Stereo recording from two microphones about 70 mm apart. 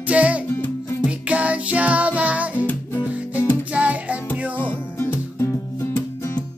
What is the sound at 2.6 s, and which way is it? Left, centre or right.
Music, left.